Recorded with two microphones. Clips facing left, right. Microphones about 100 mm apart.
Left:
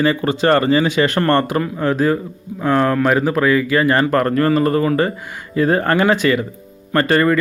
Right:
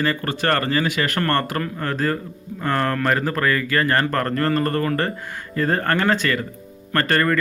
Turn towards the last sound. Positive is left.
turn(degrees=10)  # may be behind; listen again after turning